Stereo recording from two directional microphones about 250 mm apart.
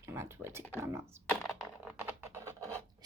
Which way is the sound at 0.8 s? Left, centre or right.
Centre.